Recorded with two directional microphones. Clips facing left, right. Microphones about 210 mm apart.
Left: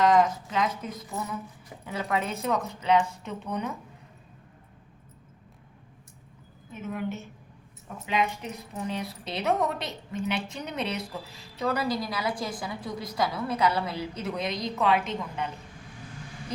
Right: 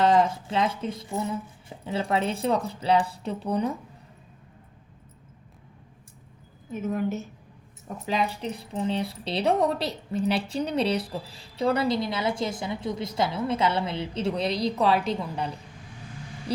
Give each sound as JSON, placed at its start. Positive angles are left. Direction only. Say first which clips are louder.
{"t": 0.0, "sound": "speech", "louder": "right 1 dB", "side_deg": -30}
{"t": 6.7, "sound": "speech", "louder": "right 5 dB", "side_deg": -40}